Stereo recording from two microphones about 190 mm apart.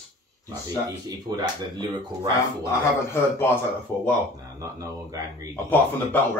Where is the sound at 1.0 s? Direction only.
20° right (ahead or behind).